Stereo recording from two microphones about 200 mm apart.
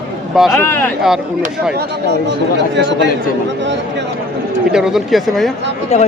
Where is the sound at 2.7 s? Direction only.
60° right (ahead or behind).